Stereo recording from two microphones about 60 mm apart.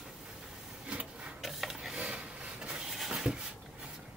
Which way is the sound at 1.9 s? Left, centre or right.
Centre.